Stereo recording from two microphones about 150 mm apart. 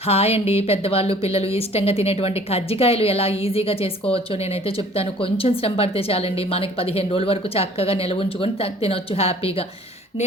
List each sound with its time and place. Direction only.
0.0 s speech: 40° left (ahead or behind)